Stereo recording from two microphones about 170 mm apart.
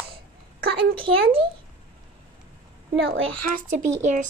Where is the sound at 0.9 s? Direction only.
30° right (ahead or behind).